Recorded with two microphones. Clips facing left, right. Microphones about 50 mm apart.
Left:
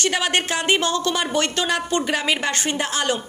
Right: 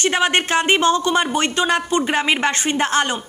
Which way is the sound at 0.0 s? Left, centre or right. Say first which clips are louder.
Right 4 dB; right.